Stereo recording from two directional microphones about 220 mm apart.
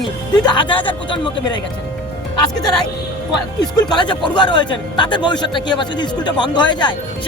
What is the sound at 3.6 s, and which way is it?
A man's voice, 20° left (ahead or behind).